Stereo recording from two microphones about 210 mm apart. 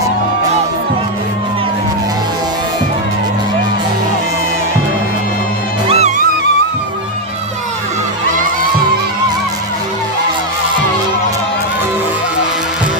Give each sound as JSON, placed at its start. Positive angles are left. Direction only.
{"t": 5.9, "sound": "music", "side_deg": -35}